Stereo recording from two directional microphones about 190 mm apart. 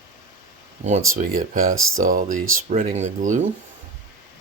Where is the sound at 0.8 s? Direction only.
40° right (ahead or behind).